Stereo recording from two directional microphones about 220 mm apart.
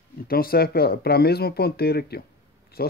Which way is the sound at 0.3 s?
45° left (ahead or behind).